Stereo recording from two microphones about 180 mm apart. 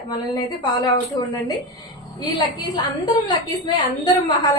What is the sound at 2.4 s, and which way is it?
A woman's voice, 25° left (ahead or behind).